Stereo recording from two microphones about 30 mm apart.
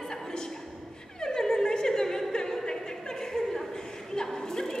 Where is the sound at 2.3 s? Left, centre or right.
Centre.